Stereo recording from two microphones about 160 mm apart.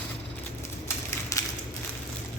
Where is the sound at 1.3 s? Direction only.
20° left (ahead or behind).